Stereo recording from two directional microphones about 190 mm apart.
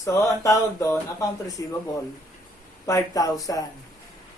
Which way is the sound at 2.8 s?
15° left (ahead or behind).